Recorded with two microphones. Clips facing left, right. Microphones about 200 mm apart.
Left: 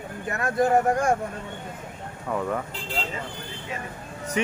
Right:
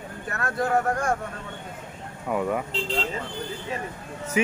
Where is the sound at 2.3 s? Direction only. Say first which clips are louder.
Right 2 dB; 10° right (ahead or behind).